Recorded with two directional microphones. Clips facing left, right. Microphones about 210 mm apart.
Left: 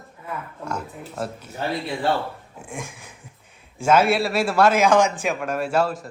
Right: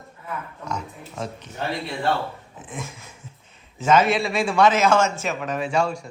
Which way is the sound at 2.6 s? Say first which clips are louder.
Even; 10° left (ahead or behind).